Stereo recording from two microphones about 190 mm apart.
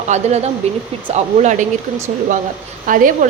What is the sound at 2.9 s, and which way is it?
Speech, 45° right (ahead or behind).